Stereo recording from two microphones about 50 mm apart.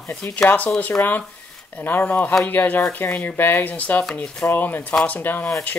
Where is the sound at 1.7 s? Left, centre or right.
Left.